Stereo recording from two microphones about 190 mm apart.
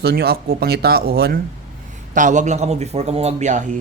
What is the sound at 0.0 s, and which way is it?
Speech, 55° right (ahead or behind).